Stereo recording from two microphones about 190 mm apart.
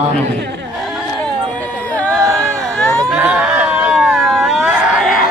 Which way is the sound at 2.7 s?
5° left (ahead or behind).